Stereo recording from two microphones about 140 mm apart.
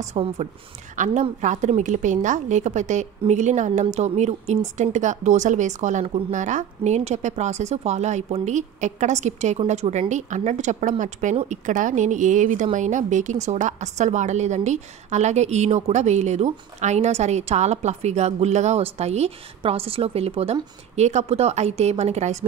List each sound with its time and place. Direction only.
0.0 s a woman's voice: 50° right (ahead or behind)
0.9 s a woman's voice: 65° right (ahead or behind)